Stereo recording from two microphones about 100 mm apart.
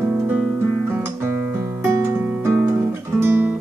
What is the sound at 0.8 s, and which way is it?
Guitar, 25° right (ahead or behind).